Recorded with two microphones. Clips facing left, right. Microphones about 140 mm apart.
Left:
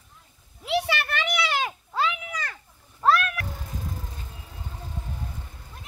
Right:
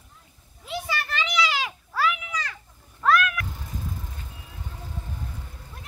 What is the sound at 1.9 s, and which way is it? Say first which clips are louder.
Children playing: right 1 dB; 25° left (ahead or behind).